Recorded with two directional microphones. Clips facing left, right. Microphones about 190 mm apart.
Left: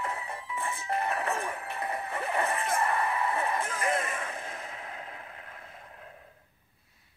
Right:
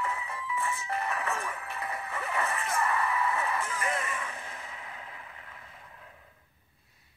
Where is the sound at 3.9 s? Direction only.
45° left (ahead or behind).